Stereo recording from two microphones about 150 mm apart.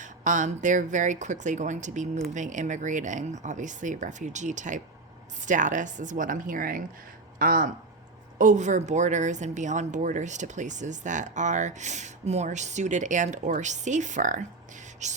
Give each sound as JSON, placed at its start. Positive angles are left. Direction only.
{"t": 0.0, "sound": "speech", "side_deg": -55}
{"t": 8.4, "sound": "a woman's voice", "side_deg": -55}